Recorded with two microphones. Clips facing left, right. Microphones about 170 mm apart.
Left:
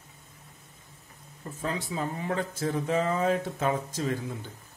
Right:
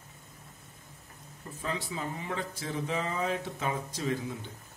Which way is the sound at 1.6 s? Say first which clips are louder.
Left 4 dB; 45° left (ahead or behind).